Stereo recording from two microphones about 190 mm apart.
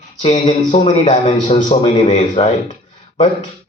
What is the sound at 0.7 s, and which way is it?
A man's voice, 30° left (ahead or behind).